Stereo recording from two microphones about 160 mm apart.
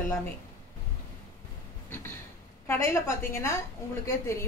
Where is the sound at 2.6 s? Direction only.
15° left (ahead or behind).